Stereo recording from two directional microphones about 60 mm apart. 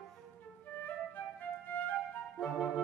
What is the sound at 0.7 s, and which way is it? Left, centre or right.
Flute, left.